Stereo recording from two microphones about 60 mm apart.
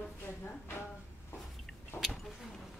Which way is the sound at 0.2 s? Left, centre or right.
Left.